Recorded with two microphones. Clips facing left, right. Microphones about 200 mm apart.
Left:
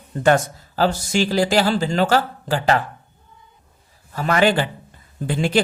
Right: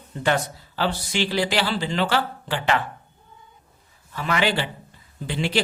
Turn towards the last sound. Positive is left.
turn(degrees=50)  # may be behind; listen again after turning